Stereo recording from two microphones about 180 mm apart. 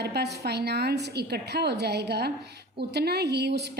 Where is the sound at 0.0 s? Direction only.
65° right (ahead or behind).